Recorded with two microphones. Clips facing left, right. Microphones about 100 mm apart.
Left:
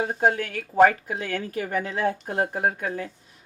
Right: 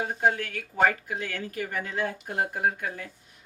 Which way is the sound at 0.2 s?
35° left (ahead or behind).